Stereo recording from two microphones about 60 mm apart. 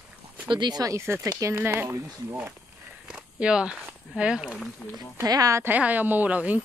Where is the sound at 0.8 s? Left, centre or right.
Right.